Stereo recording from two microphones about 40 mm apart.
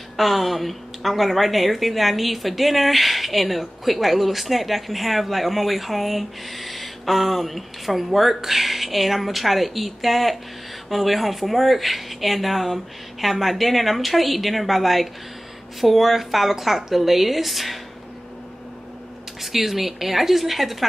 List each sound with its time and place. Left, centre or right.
0.2 s a woman's voice: centre
19.4 s a woman's voice: centre